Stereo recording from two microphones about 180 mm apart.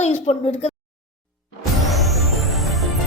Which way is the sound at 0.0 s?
35° left (ahead or behind).